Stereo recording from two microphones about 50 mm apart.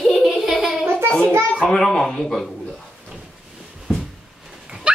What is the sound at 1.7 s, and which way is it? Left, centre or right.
Speech, centre.